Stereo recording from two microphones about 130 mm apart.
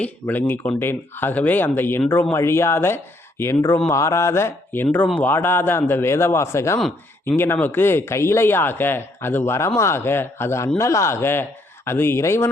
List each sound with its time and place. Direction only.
0.0 s speech: 15° left (ahead or behind)